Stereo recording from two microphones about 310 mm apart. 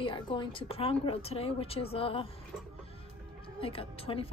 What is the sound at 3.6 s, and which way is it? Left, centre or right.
Speech, centre.